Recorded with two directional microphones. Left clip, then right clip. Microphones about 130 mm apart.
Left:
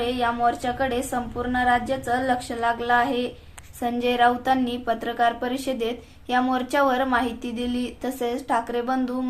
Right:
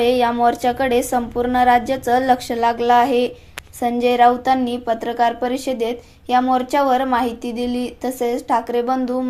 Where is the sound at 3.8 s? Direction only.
35° right (ahead or behind).